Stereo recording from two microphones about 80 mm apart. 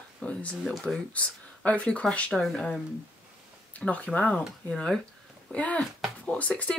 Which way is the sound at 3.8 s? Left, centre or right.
Centre.